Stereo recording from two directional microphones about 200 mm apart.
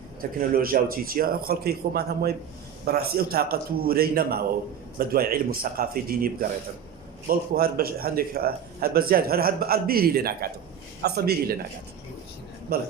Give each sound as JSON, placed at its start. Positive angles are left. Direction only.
{"t": 0.2, "sound": "a man's voice", "side_deg": -45}
{"t": 12.7, "sound": "a man's voice", "side_deg": -50}